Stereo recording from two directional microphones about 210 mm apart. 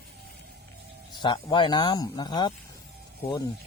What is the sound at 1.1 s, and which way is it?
Speech, 20° left (ahead or behind).